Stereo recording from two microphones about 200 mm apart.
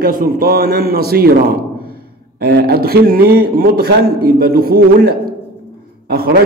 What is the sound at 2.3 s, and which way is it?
A man's voice, 55° right (ahead or behind).